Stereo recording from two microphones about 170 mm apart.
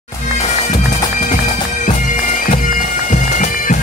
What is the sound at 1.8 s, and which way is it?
Bagpipes, 50° left (ahead or behind).